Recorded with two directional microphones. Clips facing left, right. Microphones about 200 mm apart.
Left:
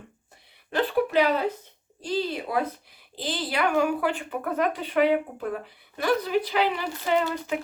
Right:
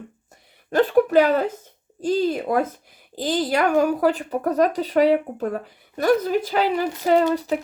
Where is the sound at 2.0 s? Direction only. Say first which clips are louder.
Right 7 dB; 45° right (ahead or behind).